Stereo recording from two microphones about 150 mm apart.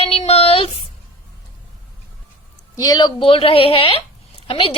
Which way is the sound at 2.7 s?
25° left (ahead or behind).